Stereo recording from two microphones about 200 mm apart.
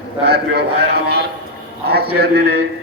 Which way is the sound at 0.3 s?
55° right (ahead or behind).